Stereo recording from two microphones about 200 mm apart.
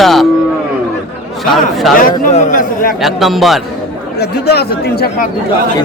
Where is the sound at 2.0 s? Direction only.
40° left (ahead or behind).